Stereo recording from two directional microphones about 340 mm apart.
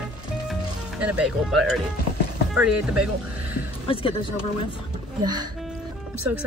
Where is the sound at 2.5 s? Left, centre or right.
Centre.